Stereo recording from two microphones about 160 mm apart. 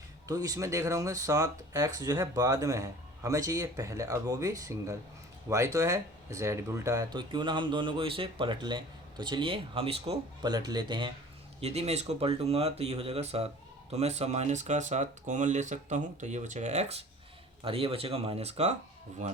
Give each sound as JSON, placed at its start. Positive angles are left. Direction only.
{"t": 0.3, "sound": "speech", "side_deg": -20}
{"t": 10.5, "sound": "speech", "side_deg": -25}
{"t": 11.6, "sound": "speech", "side_deg": -40}